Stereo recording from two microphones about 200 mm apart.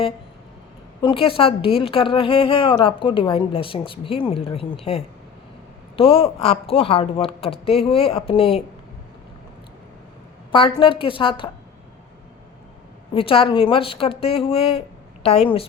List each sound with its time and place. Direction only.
1.0 s a woman's voice: 25° left (ahead or behind)
10.5 s a woman's voice: 25° left (ahead or behind)
13.1 s a woman's voice: 25° left (ahead or behind)